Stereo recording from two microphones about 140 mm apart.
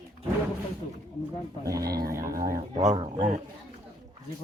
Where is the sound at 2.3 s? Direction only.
90° right.